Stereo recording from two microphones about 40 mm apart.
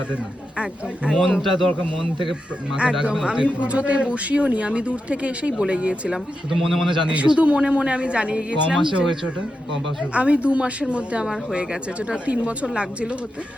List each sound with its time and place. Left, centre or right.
0.5 s speech: right
1.1 s a man's voice: centre
3.0 s speech: right
6.1 s a man's voice: centre
7.3 s speech: right
10.1 s speech: right